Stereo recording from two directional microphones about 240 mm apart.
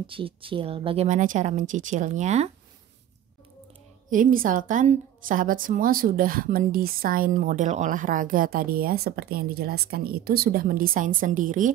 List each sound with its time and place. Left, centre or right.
0.0 s speech: right
4.1 s a woman's voice: right